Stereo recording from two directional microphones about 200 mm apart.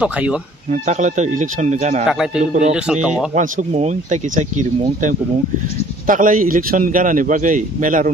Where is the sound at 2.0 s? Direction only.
5° right (ahead or behind).